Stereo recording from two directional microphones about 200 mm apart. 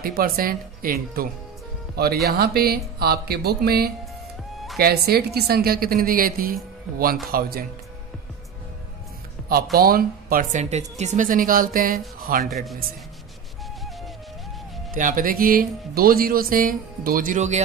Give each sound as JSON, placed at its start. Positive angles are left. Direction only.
{"t": 0.0, "sound": "speech", "side_deg": -45}
{"t": 9.5, "sound": "speech", "side_deg": -50}
{"t": 12.4, "sound": "a man's voice", "side_deg": 0}
{"t": 15.0, "sound": "speech", "side_deg": -40}